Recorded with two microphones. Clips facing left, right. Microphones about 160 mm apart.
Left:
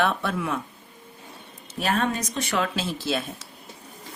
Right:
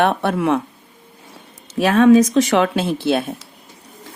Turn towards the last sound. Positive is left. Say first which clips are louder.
# right 9 dB
turn(degrees=-60)  # may be behind; listen again after turning